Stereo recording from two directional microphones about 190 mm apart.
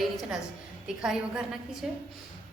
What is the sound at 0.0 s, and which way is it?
A woman's voice, centre (ahead or behind).